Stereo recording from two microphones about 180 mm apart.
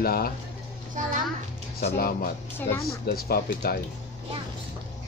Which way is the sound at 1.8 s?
55° left (ahead or behind).